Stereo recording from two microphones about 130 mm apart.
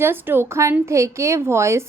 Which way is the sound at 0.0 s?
15° right (ahead or behind).